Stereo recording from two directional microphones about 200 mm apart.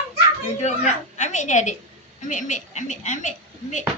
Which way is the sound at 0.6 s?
35° left (ahead or behind).